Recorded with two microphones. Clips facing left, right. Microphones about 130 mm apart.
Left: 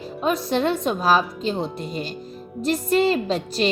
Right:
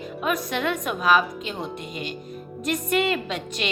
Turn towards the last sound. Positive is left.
turn(degrees=35)  # may be behind; listen again after turning